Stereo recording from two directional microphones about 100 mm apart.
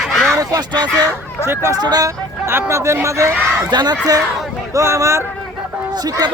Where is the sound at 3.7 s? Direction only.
45° right (ahead or behind).